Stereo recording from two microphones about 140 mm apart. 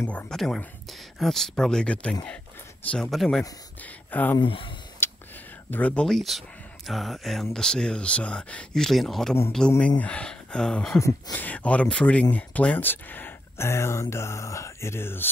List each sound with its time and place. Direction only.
0.0 s speech: 15° left (ahead or behind)
0.3 s speech: 5° left (ahead or behind)
3.8 s speech: 15° left (ahead or behind)
4.4 s speech: 40° left (ahead or behind)
5.0 s a sound: 15° left (ahead or behind)
5.7 s speech: 10° left (ahead or behind)
11.0 s speech: 20° left (ahead or behind)